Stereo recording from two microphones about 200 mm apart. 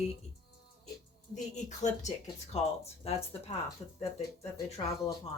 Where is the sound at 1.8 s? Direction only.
35° left (ahead or behind).